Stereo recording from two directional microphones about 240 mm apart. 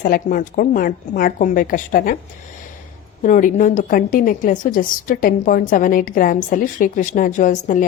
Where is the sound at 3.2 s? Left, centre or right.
Left.